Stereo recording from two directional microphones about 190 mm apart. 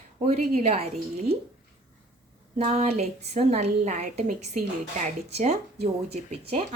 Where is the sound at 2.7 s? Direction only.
35° right (ahead or behind).